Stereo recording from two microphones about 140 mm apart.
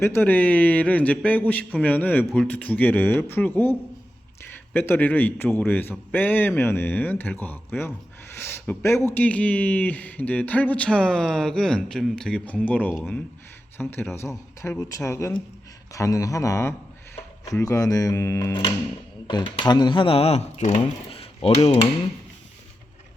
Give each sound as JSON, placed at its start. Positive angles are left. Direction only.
{"t": 0.0, "sound": "a man's voice", "side_deg": 15}
{"t": 19.5, "sound": "speech", "side_deg": 30}